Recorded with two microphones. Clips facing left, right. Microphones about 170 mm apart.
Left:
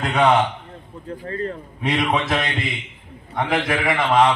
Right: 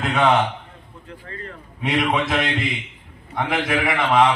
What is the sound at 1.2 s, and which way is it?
Speech, 35° left (ahead or behind).